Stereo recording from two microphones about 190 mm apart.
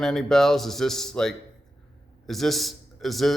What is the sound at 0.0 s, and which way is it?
A man's voice, centre (ahead or behind).